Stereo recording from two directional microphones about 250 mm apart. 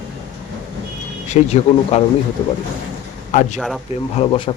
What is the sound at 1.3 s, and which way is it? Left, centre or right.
Speech, left.